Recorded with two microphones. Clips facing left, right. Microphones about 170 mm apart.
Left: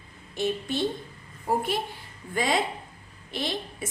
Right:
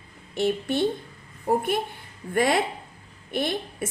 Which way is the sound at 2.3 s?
60° right (ahead or behind).